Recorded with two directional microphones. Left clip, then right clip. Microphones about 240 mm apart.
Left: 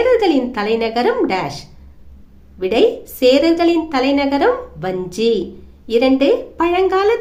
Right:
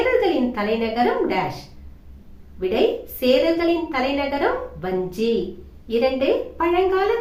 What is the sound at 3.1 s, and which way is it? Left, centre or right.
A woman's voice, left.